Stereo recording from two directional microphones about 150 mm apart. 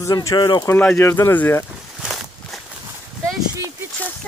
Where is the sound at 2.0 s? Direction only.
5° right (ahead or behind).